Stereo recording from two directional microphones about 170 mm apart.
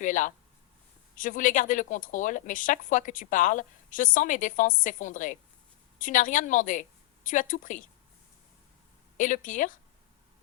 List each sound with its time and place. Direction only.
0.0 s speech: 50° left (ahead or behind)
9.1 s speech: 50° left (ahead or behind)